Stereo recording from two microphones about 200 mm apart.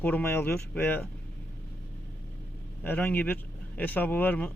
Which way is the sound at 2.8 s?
10° left (ahead or behind).